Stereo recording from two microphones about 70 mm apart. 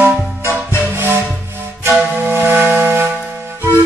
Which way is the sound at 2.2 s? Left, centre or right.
Right.